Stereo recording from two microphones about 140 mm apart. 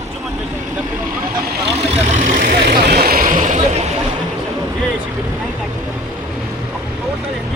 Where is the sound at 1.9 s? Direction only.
60° right (ahead or behind).